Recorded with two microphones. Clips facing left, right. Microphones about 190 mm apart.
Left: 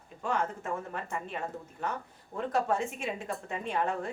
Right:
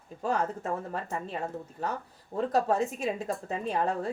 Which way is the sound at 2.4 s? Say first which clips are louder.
Right 3 dB; 35° right (ahead or behind).